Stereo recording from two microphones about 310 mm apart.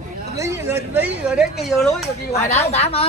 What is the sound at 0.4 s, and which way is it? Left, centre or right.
Speech, centre.